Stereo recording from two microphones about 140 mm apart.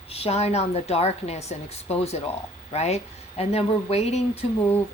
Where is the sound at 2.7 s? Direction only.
50° left (ahead or behind).